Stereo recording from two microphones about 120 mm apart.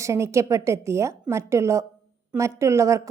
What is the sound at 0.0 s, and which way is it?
A woman's voice, 25° right (ahead or behind).